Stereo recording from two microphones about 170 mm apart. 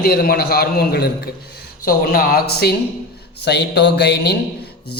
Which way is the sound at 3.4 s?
80° left.